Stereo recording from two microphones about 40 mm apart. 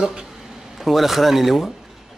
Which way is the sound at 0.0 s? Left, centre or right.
Centre.